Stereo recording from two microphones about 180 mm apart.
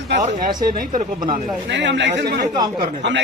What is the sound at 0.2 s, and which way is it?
Speech, 50° right (ahead or behind).